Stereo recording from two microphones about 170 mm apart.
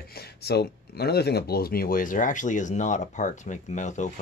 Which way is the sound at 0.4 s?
70° left (ahead or behind).